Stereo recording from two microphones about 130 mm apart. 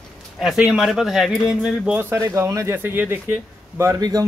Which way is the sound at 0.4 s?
5° right (ahead or behind).